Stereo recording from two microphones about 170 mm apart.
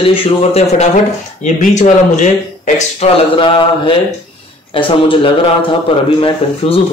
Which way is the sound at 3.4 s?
30° left (ahead or behind).